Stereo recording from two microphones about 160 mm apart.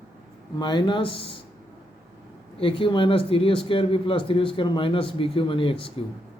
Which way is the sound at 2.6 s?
35° left (ahead or behind).